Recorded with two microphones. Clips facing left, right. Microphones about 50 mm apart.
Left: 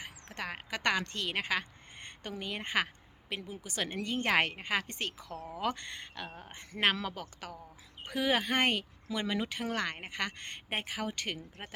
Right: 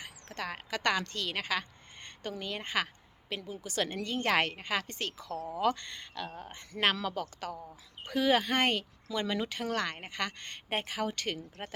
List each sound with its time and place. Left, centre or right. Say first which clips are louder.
0.0 s a woman's voice: right 1 dB; left
6.2 s speech: right 3 dB; centre
6.5 s a woman's voice: right 2 dB; left
7.0 s a woman's voice: right 4 dB; centre
10.7 s speech: right 3 dB; centre